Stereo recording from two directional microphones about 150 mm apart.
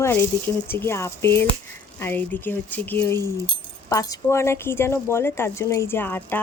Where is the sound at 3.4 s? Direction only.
25° left (ahead or behind).